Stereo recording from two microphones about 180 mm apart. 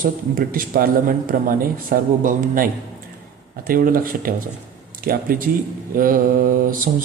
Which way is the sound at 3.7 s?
50° right (ahead or behind).